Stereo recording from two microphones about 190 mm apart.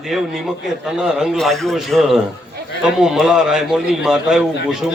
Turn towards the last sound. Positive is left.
turn(degrees=0)  # may be behind; listen again after turning